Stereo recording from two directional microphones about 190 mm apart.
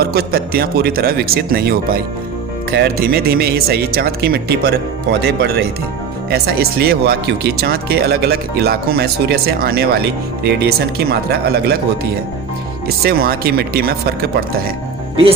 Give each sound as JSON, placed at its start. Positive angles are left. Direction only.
{"t": 0.0, "sound": "speech", "side_deg": -55}
{"t": 13.0, "sound": "speech", "side_deg": -50}